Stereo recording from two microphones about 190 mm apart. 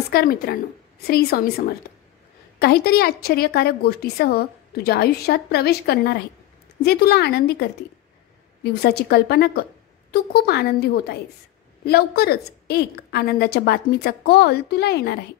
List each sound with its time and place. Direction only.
0.1 s a woman's voice: 50° left (ahead or behind)
8.8 s a woman's voice: 55° left (ahead or behind)